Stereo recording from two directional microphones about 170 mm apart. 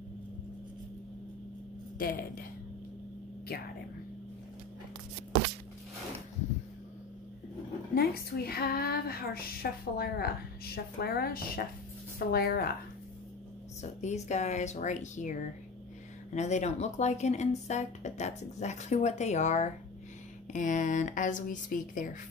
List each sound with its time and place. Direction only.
2.0 s speech: 60° left (ahead or behind)
7.9 s speech: 65° left (ahead or behind)
14.0 s speech: 40° left (ahead or behind)
16.3 s speech: 45° left (ahead or behind)